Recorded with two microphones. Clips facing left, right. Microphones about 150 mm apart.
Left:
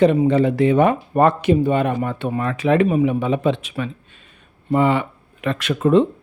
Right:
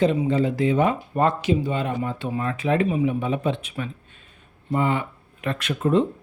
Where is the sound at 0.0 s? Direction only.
65° left (ahead or behind).